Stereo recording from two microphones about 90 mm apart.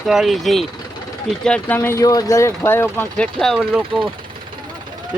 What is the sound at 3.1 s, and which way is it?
Speech, 5° left (ahead or behind).